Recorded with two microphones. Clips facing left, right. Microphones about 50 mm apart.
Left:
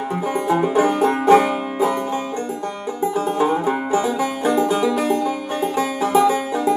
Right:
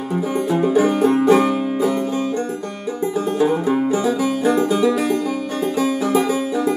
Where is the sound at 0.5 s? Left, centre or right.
Left.